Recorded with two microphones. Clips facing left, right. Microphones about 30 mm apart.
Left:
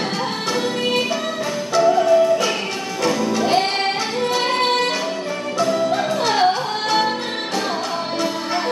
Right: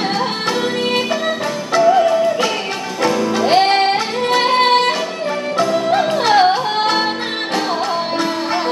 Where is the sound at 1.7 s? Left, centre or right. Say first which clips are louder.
Right 2 dB; right.